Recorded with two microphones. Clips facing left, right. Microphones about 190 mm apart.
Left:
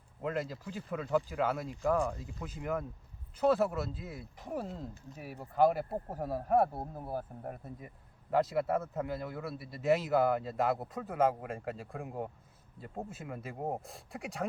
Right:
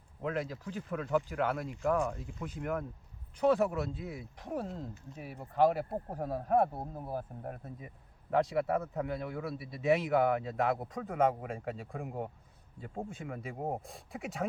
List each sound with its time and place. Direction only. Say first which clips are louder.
0.2 s speech: even; 10° left (ahead or behind)
2.0 s speech: even; 35° left (ahead or behind)
2.4 s a man's voice: even; 5° left (ahead or behind)